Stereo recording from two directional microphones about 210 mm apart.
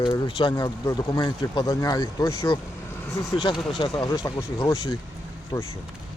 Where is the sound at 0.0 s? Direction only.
25° left (ahead or behind).